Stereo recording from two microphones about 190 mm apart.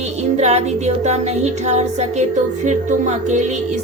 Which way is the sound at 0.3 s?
35° right (ahead or behind).